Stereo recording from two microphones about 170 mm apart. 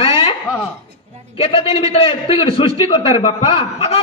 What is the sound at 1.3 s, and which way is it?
A man's voice, 35° left (ahead or behind).